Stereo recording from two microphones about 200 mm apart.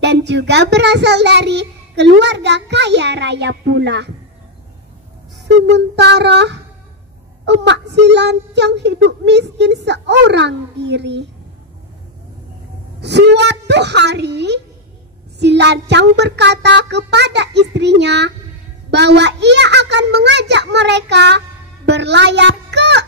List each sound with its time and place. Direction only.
0.0 s a child's voice: 60° right (ahead or behind)
5.7 s a child's voice: 60° right (ahead or behind)
13.0 s a child's voice: 60° right (ahead or behind)